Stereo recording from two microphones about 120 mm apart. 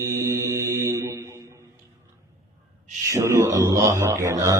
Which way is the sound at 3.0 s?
25° right (ahead or behind).